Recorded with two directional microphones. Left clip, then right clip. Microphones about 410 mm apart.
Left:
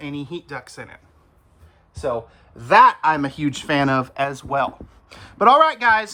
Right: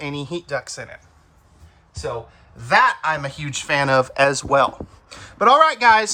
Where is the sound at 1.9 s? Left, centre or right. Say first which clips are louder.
Left 3 dB; centre.